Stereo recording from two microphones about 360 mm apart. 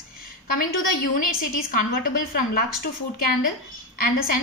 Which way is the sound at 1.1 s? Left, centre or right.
Left.